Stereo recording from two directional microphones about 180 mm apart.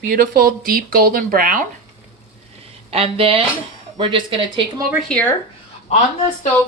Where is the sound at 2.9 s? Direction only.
30° right (ahead or behind).